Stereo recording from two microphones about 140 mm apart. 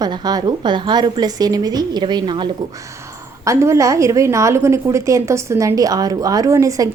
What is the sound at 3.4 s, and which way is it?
A woman's voice, 20° right (ahead or behind).